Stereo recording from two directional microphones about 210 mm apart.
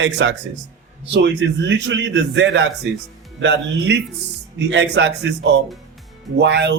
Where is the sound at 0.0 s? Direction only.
60° right (ahead or behind).